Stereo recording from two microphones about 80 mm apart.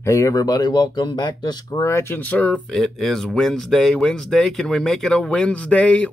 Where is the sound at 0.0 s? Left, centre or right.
Left.